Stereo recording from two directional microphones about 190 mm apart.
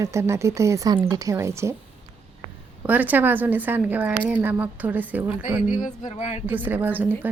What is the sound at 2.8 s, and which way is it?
A woman's voice, 10° right (ahead or behind).